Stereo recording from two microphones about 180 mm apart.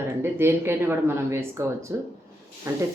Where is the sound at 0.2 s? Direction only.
15° right (ahead or behind).